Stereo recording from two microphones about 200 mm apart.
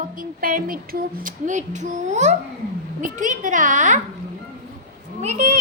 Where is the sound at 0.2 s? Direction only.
45° right (ahead or behind).